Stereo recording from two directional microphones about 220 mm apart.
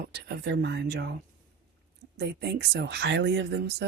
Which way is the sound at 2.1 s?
50° right (ahead or behind).